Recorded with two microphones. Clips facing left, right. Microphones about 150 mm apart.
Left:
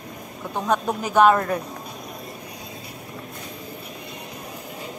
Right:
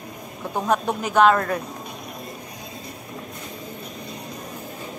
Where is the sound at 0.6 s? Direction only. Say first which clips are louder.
Right 1 dB; centre (ahead or behind).